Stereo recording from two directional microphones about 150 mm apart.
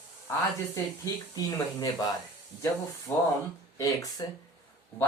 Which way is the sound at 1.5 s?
25° left (ahead or behind).